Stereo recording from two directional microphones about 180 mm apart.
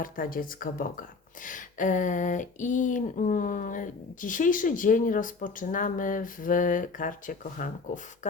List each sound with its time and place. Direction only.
0.0 s speech: 50° left (ahead or behind)
8.2 s beatboxing: 40° left (ahead or behind)